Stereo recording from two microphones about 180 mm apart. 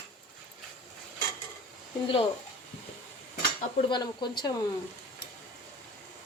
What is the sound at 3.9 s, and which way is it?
Speech, 25° left (ahead or behind).